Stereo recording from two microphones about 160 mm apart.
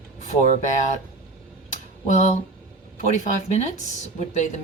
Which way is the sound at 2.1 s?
45° left (ahead or behind).